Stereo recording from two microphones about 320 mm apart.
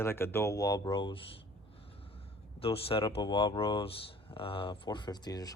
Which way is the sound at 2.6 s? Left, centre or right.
Centre.